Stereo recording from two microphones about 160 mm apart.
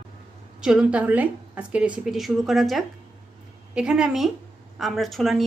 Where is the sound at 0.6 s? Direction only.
5° right (ahead or behind).